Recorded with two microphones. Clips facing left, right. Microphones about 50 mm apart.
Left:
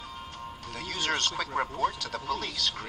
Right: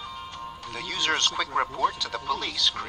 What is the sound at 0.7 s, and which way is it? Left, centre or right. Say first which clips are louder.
Speech: right 4 dB; right.